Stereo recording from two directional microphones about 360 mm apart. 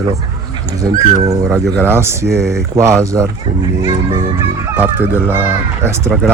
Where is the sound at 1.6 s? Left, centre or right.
Centre.